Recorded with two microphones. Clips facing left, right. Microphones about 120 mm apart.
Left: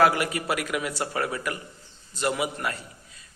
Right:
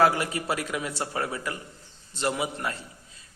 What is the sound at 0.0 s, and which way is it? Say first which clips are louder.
A man's voice: left 1 dB; 25° right (ahead or behind).